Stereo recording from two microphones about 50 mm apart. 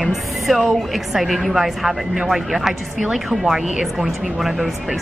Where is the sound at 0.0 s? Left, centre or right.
Centre.